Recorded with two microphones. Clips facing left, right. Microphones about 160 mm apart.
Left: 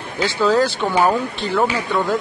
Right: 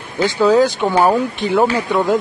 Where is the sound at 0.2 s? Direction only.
15° right (ahead or behind).